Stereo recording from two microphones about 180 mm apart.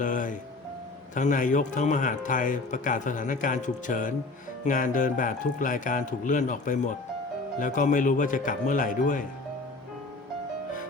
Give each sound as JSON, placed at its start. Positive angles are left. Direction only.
{"t": 0.0, "sound": "speech", "side_deg": 45}